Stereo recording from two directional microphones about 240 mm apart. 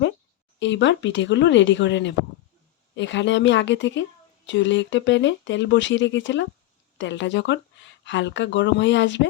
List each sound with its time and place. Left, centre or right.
0.6 s speech: left